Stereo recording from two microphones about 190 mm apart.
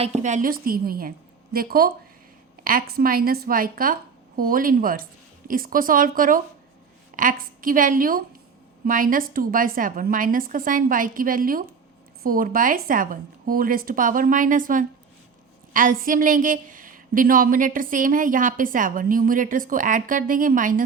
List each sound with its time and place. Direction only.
0.0 s a woman's voice: 35° right (ahead or behind)